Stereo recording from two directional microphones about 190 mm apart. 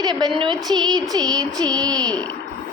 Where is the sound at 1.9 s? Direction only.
5° left (ahead or behind).